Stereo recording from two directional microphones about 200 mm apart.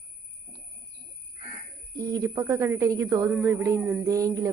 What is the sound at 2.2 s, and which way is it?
Speech, 15° right (ahead or behind).